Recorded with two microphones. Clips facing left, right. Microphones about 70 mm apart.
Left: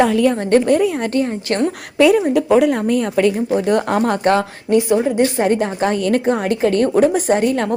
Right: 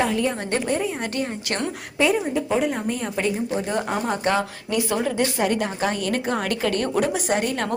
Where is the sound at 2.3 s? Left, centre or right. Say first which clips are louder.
Left 9 dB; left.